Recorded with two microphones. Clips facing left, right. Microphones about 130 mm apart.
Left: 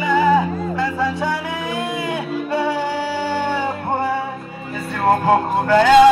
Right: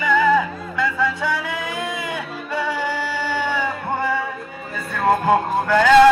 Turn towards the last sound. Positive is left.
turn(degrees=15)  # may be behind; listen again after turning